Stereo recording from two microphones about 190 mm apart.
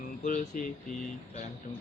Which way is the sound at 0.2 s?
40° left (ahead or behind).